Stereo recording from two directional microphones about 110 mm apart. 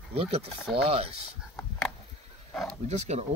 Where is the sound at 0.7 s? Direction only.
65° right (ahead or behind).